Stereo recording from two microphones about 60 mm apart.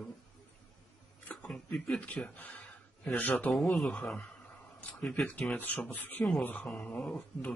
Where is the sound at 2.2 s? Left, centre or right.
Left.